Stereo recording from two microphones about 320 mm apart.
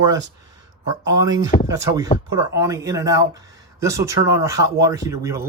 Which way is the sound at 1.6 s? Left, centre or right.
Centre.